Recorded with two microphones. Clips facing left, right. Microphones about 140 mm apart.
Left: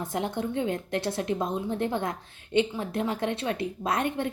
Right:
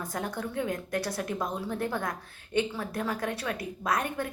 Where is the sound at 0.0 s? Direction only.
25° left (ahead or behind).